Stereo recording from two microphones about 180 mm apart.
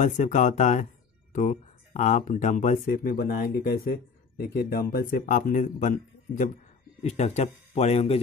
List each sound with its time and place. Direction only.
0.0 s speech: 45° left (ahead or behind)